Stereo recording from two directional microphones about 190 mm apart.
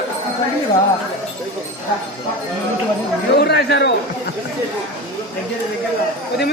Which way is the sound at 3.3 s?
60° left (ahead or behind).